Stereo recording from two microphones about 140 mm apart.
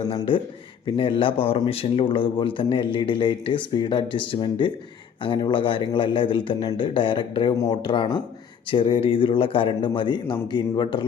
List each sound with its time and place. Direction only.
0.1 s speech: 40° left (ahead or behind)
7.5 s speech: 25° left (ahead or behind)
7.8 s speech: 40° left (ahead or behind)